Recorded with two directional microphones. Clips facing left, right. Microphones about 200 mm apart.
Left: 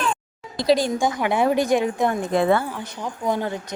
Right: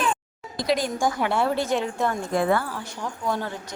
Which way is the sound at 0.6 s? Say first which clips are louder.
Left 4 dB; 30° left (ahead or behind).